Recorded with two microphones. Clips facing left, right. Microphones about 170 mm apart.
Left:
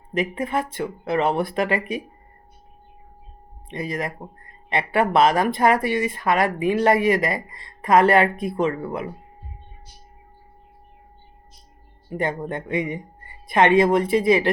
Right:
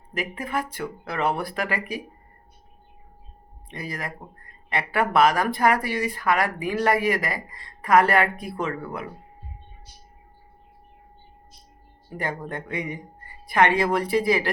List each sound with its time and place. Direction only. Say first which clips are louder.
0.1 s speech: left 5 dB; 25° left (ahead or behind)
3.7 s speech: left 6 dB; 20° left (ahead or behind)
12.1 s speech: left 5 dB; 20° left (ahead or behind)